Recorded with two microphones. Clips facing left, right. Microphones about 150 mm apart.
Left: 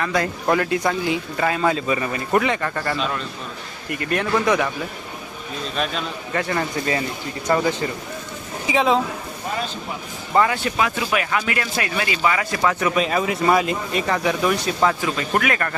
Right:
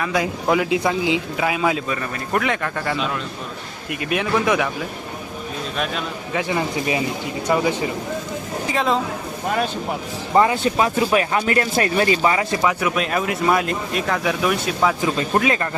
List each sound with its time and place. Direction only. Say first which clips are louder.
0.0 s a man's voice: even; 10° right (ahead or behind)
1.9 s speech: left 3 dB; 5° left (ahead or behind)
3.8 s a man's voice: even; 90° right
4.1 s speech: even; 5° right (ahead or behind)
5.7 s a man's voice: left 1 dB; 5° right (ahead or behind)
8.6 s speech: left 3 dB; centre (ahead or behind)
10.3 s speech: right 2 dB; 25° right (ahead or behind)
12.6 s speech: left 4 dB; 5° right (ahead or behind)
15.0 s speech: right 2 dB; 25° right (ahead or behind)